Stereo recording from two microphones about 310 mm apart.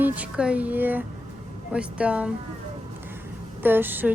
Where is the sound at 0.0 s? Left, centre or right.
Centre.